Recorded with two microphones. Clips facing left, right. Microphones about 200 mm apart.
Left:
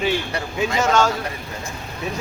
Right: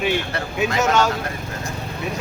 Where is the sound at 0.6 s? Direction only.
5° right (ahead or behind).